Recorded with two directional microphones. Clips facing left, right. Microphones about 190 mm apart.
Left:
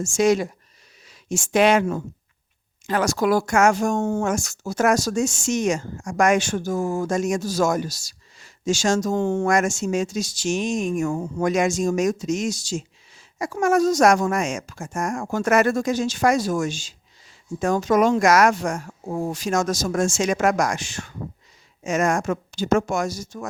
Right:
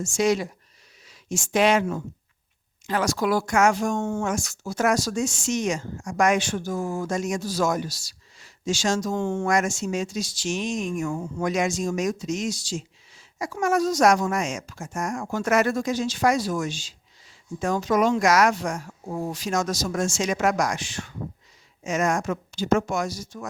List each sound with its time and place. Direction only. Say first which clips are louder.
0.0 s speech: left 4 dB; 50° left (ahead or behind)